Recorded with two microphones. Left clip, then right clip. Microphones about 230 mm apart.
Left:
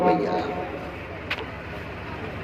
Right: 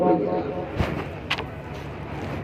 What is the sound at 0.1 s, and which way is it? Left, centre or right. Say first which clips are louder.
Speech: even; left.